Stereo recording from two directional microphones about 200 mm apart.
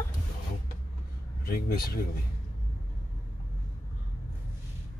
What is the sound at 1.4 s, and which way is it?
Speech, 45° left (ahead or behind).